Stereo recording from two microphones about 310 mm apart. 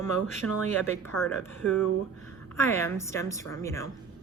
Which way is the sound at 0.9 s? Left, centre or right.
Centre.